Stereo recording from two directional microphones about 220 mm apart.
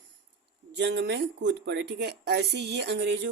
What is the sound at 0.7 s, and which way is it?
Speech, 50° right (ahead or behind).